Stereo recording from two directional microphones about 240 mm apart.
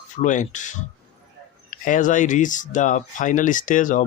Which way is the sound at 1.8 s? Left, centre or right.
Left.